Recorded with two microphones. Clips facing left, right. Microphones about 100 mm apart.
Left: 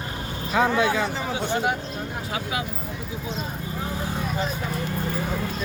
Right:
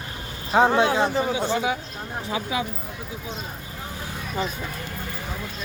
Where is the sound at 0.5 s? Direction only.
30° right (ahead or behind).